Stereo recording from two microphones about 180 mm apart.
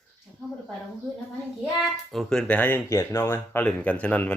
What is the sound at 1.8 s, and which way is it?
Speech, centre (ahead or behind).